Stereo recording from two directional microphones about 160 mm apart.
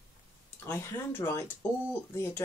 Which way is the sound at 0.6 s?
15° left (ahead or behind).